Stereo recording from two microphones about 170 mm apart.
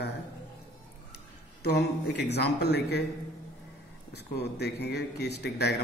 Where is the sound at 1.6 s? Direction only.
80° left.